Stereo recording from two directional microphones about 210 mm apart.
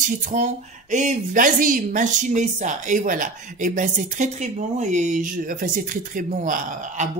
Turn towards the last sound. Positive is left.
turn(degrees=-40)  # may be behind; listen again after turning